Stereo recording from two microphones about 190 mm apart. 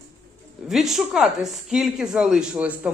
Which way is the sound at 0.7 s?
Centre (ahead or behind).